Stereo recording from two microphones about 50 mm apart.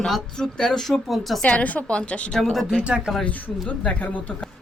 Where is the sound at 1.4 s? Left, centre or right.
Left.